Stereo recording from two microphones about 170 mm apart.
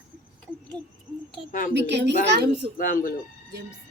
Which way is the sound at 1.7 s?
90° right.